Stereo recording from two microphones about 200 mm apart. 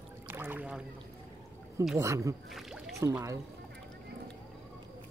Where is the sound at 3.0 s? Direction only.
15° right (ahead or behind).